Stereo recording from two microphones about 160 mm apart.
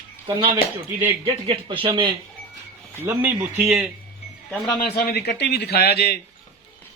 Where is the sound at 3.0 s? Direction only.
10° right (ahead or behind).